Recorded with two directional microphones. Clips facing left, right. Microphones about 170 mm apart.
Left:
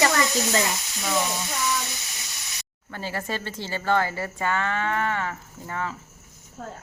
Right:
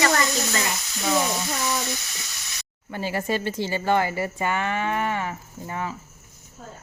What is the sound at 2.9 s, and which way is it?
Speech, 15° right (ahead or behind).